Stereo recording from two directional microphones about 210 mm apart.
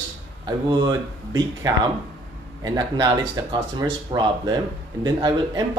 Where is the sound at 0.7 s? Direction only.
20° right (ahead or behind).